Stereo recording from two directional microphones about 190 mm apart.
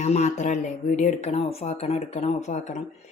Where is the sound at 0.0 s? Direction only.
35° left (ahead or behind).